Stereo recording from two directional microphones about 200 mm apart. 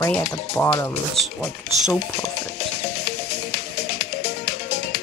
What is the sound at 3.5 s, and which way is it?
Music, 55° left (ahead or behind).